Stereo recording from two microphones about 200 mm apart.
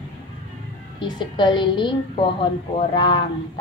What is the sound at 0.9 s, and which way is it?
A woman's voice, 20° left (ahead or behind).